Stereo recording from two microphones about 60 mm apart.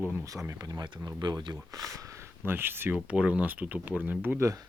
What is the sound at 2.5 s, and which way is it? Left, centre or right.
Speech, right.